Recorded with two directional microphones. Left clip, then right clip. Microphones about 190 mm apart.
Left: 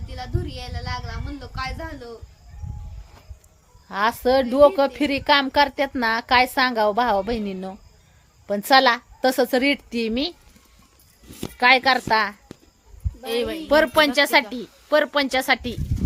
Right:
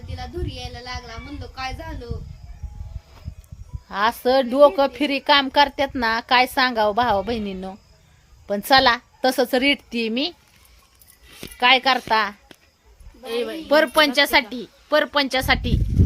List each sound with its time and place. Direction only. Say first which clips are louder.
0.1 s speech: even; 10° left (ahead or behind)
3.8 s a woman's voice: right 1 dB; centre (ahead or behind)
11.5 s a woman's voice: even; 5° left (ahead or behind)
13.2 s a woman's voice: left 1 dB; 45° left (ahead or behind)
13.7 s a woman's voice: right 1 dB; centre (ahead or behind)